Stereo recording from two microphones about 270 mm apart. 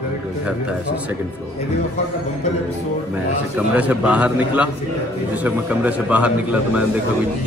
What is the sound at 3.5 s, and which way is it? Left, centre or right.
A man's voice, centre.